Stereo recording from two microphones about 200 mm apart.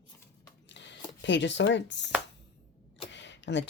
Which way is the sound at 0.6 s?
60° left (ahead or behind).